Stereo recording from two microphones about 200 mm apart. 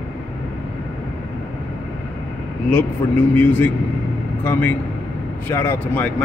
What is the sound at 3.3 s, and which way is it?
A man's voice, 5° left (ahead or behind).